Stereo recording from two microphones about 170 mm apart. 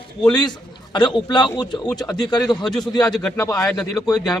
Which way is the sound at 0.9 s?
25° left (ahead or behind).